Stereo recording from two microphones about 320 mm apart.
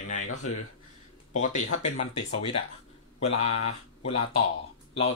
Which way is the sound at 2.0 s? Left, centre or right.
Left.